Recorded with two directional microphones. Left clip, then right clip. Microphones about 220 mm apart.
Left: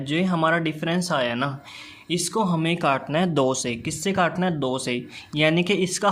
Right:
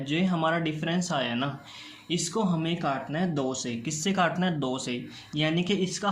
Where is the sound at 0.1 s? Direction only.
30° left (ahead or behind).